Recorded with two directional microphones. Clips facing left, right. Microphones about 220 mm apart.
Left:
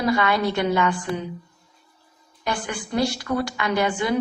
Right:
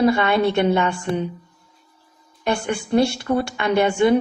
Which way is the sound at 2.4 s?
25° right (ahead or behind).